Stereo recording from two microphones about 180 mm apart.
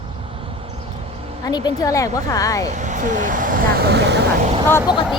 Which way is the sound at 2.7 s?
40° right (ahead or behind).